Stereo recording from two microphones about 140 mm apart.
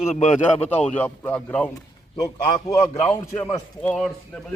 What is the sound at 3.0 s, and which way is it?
A man's voice, 15° left (ahead or behind).